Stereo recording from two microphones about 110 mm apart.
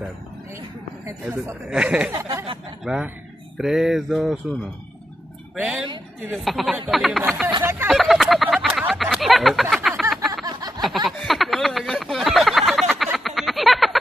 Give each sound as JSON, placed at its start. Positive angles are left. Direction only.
{"t": 1.3, "sound": "speech", "side_deg": -25}
{"t": 1.7, "sound": "speech", "side_deg": -10}
{"t": 2.1, "sound": "speech", "side_deg": -30}
{"t": 2.8, "sound": "speech", "side_deg": -5}
{"t": 5.6, "sound": "speech", "side_deg": -10}
{"t": 6.3, "sound": "speech", "side_deg": 0}
{"t": 8.7, "sound": "a sound", "side_deg": 0}